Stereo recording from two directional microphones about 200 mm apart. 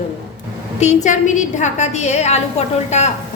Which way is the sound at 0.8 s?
35° left (ahead or behind).